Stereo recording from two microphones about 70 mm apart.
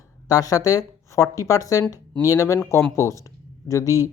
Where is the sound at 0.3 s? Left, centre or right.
Left.